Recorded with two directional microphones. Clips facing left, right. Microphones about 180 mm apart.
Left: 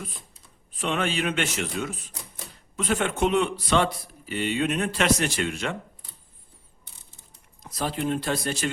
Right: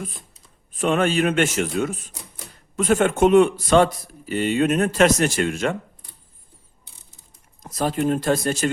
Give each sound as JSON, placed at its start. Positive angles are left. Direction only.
{"t": 0.8, "sound": "speech", "side_deg": -45}
{"t": 7.6, "sound": "speech", "side_deg": -45}